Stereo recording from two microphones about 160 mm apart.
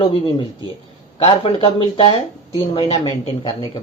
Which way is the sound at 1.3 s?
35° left (ahead or behind).